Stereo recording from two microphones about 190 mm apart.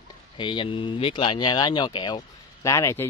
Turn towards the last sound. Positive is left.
turn(degrees=15)  # may be behind; listen again after turning